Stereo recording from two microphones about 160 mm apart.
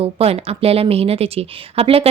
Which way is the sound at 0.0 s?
40° right (ahead or behind).